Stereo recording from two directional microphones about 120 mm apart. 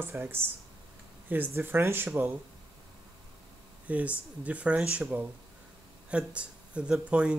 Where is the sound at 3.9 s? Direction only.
10° right (ahead or behind).